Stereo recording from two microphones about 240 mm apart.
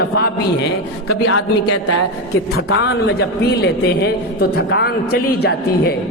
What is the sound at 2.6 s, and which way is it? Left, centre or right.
A man's voice, left.